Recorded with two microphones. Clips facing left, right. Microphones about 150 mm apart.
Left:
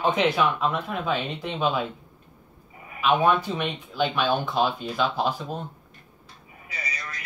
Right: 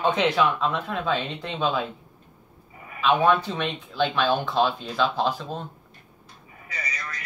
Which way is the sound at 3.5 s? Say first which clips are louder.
Right 1 dB; 15° left (ahead or behind).